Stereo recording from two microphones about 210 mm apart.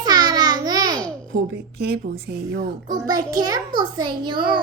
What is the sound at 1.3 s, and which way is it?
Speech, 50° right (ahead or behind).